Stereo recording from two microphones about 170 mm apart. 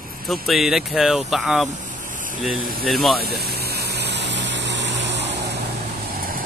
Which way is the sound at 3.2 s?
65° right (ahead or behind).